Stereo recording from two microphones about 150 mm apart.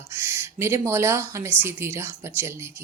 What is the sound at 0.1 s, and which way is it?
Speech, 15° right (ahead or behind).